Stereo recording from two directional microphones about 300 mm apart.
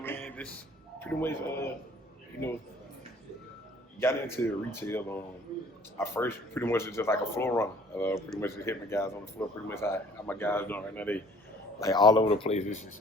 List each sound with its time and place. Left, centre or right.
0.0 s a sound: centre
0.9 s speech: centre
4.4 s speech: centre; by 12.9 s left